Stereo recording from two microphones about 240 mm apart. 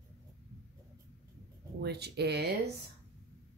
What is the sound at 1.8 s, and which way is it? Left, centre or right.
Speech, right.